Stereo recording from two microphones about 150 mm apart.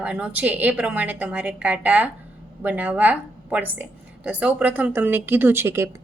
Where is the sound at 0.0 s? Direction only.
10° right (ahead or behind).